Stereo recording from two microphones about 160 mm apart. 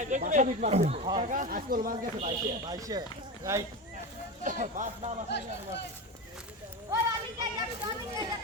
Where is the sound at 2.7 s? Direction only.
25° right (ahead or behind).